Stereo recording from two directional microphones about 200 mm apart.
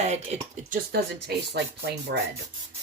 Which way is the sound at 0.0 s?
35° right (ahead or behind).